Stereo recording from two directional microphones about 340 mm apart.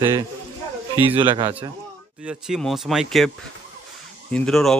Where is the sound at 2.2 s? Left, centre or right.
Centre.